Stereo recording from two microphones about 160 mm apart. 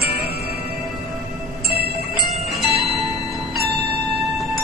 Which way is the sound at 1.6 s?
80° right.